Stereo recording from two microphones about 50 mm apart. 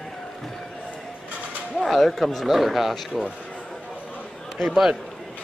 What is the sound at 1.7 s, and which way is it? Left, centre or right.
Speech, centre.